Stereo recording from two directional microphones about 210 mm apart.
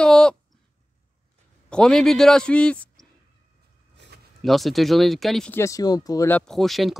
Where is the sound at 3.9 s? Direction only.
50° right (ahead or behind).